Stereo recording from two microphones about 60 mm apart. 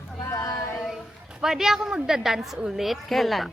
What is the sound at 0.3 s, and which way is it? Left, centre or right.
Female singing, left.